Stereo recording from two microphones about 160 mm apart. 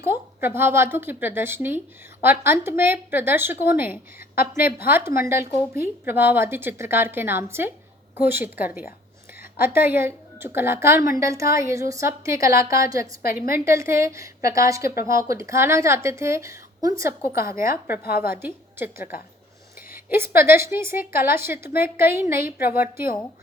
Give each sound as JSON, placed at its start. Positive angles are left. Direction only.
{"t": 0.0, "sound": "a woman's voice", "side_deg": -15}
{"t": 13.2, "sound": "a woman's voice", "side_deg": 70}
{"t": 13.5, "sound": "a woman's voice", "side_deg": -15}
{"t": 18.0, "sound": "a woman's voice", "side_deg": 70}
{"t": 18.4, "sound": "a woman's voice", "side_deg": -15}